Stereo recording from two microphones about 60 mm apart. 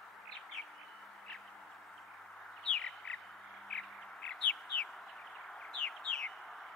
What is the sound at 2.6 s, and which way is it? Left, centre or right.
Bird, centre.